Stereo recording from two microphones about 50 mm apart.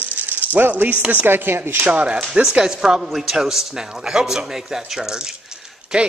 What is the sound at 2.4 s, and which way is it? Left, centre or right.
A man's voice, centre.